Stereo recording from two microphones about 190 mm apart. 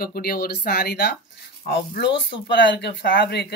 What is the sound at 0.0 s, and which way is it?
Speech, 50° left (ahead or behind).